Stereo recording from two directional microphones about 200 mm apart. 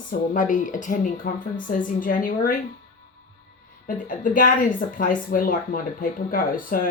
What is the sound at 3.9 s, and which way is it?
A woman's voice, 40° left (ahead or behind).